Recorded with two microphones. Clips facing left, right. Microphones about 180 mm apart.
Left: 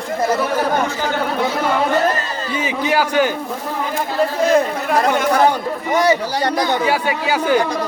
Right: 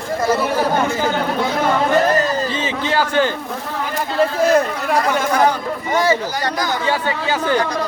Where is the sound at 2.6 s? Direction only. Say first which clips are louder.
Left 1 dB; 10° left (ahead or behind).